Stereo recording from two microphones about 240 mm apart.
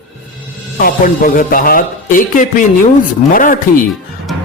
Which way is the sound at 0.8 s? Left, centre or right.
Left.